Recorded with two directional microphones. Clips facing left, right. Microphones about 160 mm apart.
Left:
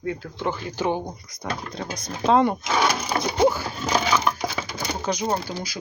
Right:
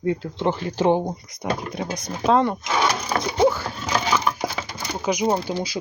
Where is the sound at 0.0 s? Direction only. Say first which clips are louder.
Right 5 dB; 25° right (ahead or behind).